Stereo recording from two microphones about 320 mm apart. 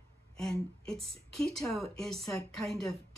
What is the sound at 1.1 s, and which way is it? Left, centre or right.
A woman's voice, centre.